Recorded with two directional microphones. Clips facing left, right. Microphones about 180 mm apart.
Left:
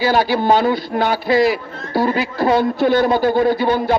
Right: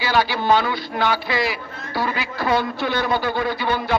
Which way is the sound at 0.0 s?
45° left (ahead or behind).